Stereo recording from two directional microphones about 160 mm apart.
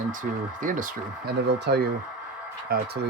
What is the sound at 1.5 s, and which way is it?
Speech, 90° right.